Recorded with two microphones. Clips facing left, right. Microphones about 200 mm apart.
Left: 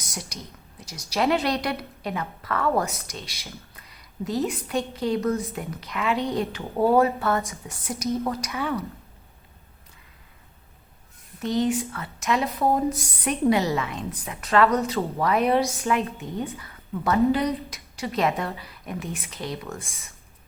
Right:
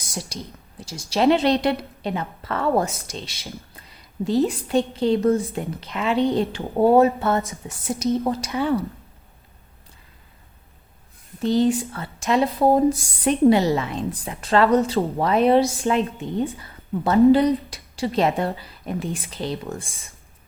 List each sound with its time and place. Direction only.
0.0 s a woman's voice: 30° right (ahead or behind)
11.3 s a woman's voice: 30° right (ahead or behind)